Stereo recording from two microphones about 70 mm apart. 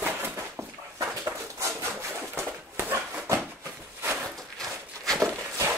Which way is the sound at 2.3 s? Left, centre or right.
Right.